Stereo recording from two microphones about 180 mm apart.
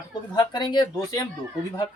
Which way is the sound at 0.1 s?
25° left (ahead or behind).